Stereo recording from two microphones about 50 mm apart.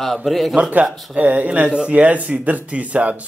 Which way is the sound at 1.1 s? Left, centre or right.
Right.